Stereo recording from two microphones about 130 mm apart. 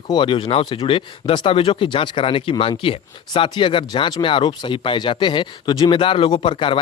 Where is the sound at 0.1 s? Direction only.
40° left (ahead or behind).